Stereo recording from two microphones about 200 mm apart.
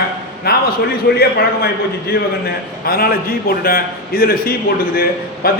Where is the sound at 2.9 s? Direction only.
50° left (ahead or behind).